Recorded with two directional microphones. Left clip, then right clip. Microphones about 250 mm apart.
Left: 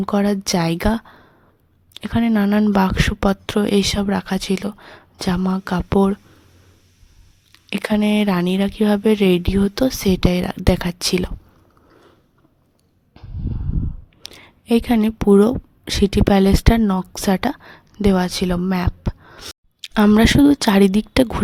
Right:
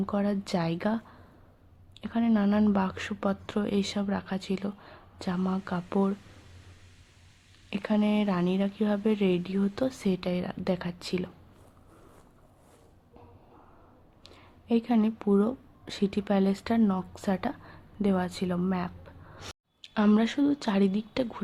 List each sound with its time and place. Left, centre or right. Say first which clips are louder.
0.0 s speech: left 11 dB; left
7.7 s speech: left 9 dB; left
14.3 s a woman's voice: left 11 dB; left